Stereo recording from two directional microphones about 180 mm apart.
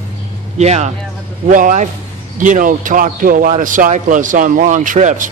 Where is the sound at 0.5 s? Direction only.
40° right (ahead or behind).